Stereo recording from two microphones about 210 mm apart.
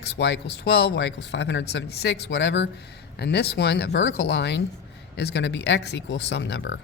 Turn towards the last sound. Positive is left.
turn(degrees=60)  # may be behind; listen again after turning